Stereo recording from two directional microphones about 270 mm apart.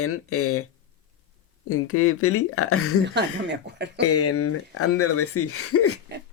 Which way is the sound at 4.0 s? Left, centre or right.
Left.